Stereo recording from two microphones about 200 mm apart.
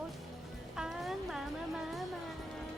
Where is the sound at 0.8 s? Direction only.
Centre (ahead or behind).